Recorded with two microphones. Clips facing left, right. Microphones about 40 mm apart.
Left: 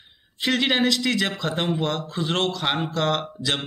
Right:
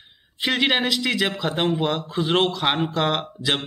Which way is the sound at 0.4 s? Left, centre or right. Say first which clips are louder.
Even; centre.